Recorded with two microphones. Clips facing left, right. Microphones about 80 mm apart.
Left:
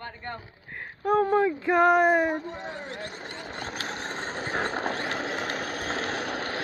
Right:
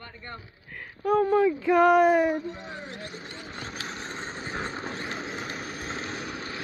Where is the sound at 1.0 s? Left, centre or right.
Left.